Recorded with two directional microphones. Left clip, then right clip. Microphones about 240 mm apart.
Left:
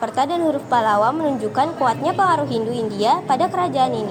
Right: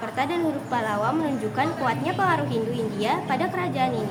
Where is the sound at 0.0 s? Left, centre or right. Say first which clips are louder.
Left 6 dB; left.